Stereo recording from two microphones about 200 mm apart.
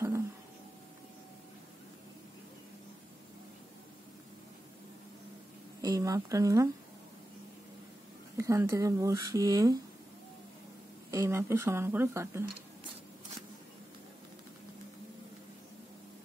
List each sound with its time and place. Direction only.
5.8 s speech: 15° right (ahead or behind)
8.4 s speech: 15° right (ahead or behind)
11.1 s speech: 15° right (ahead or behind)